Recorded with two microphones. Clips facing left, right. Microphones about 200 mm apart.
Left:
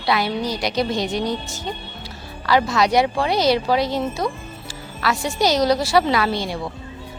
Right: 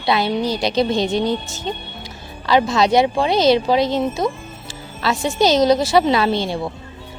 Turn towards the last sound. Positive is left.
turn(degrees=-25)  # may be behind; listen again after turning